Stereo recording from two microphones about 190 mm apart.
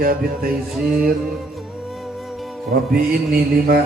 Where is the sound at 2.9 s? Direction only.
55° right (ahead or behind).